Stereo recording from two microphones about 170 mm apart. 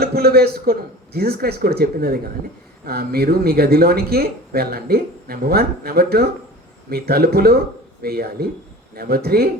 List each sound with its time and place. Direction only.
0.0 s speech: 65° right (ahead or behind)